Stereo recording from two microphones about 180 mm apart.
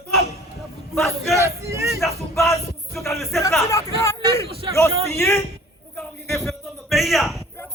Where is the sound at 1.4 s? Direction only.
15° right (ahead or behind).